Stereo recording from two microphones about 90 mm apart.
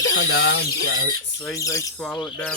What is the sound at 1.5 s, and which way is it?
Speech, 40° left (ahead or behind).